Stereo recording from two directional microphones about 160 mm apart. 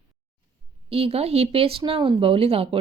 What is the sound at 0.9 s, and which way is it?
Speech, 40° right (ahead or behind).